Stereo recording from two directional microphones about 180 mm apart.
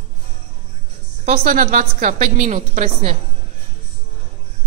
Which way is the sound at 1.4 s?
50° right (ahead or behind).